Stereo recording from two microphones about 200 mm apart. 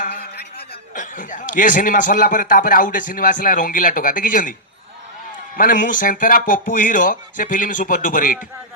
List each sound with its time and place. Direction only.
0.0 s a man's voice: 50° left (ahead or behind)
5.5 s speech: 45° left (ahead or behind)